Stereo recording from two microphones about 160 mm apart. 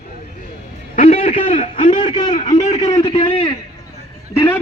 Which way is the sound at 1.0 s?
35° left (ahead or behind).